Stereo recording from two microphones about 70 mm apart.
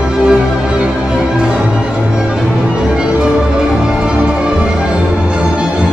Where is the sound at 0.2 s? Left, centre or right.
Centre.